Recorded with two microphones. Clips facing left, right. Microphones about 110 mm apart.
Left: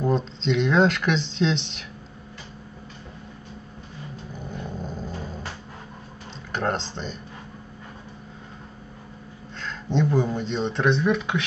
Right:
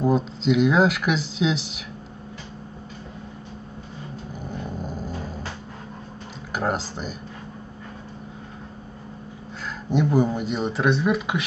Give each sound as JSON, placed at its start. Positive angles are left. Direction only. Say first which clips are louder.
{"t": 0.0, "sound": "speech", "louder": "right 3 dB", "side_deg": -5}
{"t": 4.5, "sound": "growling", "louder": "right 2 dB", "side_deg": -5}
{"t": 6.5, "sound": "speech", "louder": "right 1 dB", "side_deg": -5}
{"t": 9.8, "sound": "speech", "louder": "right 2 dB", "side_deg": -10}